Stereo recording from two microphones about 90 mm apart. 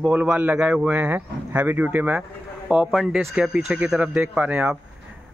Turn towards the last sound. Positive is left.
turn(degrees=-15)  # may be behind; listen again after turning